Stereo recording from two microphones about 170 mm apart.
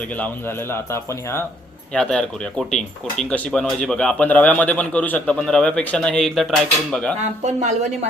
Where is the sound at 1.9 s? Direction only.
5° left (ahead or behind).